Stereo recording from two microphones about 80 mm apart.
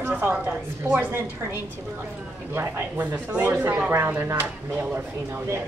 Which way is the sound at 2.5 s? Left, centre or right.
Right.